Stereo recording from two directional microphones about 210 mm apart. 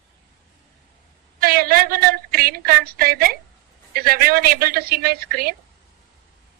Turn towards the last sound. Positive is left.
turn(degrees=-45)  # may be behind; listen again after turning